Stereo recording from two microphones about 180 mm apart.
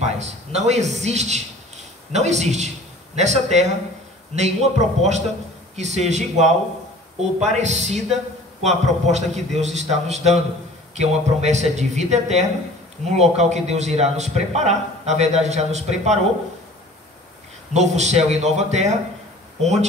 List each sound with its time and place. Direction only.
0.0 s a man's voice: 40° right (ahead or behind)
17.7 s a man's voice: 40° right (ahead or behind)